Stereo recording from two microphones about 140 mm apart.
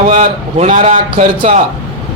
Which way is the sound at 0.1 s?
60° right (ahead or behind).